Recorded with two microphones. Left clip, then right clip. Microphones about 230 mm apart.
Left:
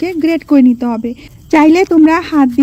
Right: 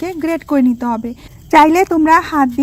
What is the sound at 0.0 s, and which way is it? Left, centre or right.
Speech, centre.